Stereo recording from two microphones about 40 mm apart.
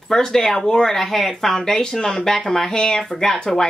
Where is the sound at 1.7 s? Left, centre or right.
Centre.